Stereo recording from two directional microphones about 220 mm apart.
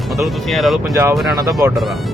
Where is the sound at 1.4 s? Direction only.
15° right (ahead or behind).